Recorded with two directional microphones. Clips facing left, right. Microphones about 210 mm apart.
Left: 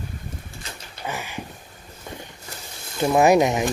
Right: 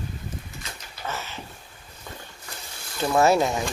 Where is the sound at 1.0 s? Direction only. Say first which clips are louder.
Left 3 dB; 15° left (ahead or behind).